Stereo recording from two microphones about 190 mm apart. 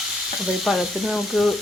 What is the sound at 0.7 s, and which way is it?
Speech, centre (ahead or behind).